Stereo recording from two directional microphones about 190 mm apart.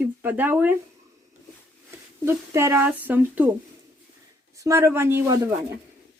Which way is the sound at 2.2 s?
15° right (ahead or behind).